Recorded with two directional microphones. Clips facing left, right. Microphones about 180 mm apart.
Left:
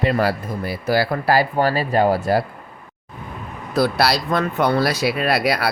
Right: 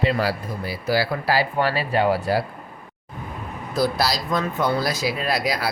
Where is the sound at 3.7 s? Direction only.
65° left (ahead or behind).